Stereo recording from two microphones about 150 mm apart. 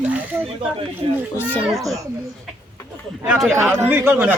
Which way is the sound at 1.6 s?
Centre (ahead or behind).